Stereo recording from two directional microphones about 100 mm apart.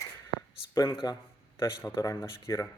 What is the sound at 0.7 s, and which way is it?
Speech, 40° left (ahead or behind).